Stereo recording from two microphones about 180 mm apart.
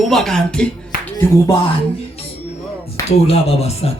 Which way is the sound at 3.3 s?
35° left (ahead or behind).